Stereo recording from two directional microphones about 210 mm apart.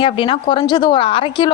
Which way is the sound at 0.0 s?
25° left (ahead or behind).